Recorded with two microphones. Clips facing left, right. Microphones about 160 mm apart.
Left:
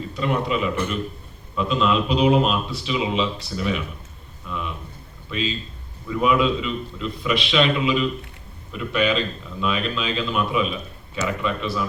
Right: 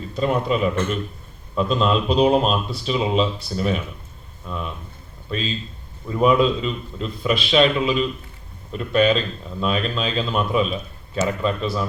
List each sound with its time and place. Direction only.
0.2 s speech: 40° right (ahead or behind)